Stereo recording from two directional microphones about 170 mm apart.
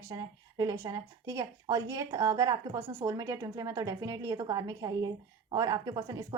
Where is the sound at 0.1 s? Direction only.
25° right (ahead or behind).